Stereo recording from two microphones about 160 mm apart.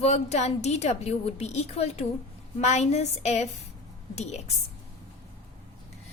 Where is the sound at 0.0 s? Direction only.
45° left (ahead or behind).